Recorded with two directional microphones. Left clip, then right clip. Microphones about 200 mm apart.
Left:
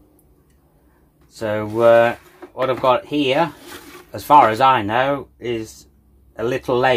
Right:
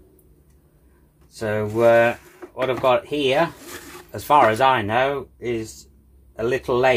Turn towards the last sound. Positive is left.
turn(degrees=35)  # may be behind; listen again after turning